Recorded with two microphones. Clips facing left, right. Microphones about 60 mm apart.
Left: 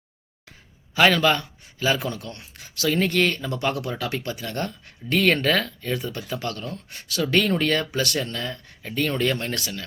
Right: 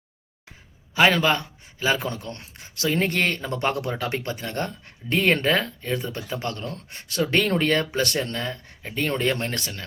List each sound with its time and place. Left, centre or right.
0.9 s a man's voice: centre
1.8 s speech: right